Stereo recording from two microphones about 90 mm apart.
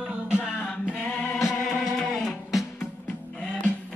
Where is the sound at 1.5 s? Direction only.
Centre (ahead or behind).